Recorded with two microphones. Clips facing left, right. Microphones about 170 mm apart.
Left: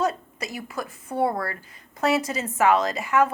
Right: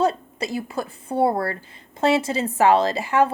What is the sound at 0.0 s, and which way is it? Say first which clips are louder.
A woman's voice: right 4 dB; 30° right (ahead or behind).